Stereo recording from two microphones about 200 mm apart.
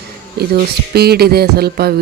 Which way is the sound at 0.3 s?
50° right (ahead or behind).